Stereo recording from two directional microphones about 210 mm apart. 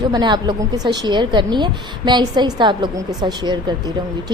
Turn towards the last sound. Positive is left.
turn(degrees=-20)  # may be behind; listen again after turning